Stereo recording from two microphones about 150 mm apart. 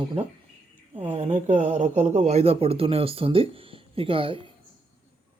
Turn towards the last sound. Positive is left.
turn(degrees=-35)  # may be behind; listen again after turning